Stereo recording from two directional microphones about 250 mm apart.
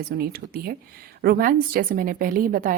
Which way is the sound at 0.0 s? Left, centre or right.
Right.